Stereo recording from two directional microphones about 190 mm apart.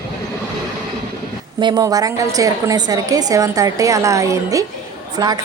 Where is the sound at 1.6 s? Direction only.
20° right (ahead or behind).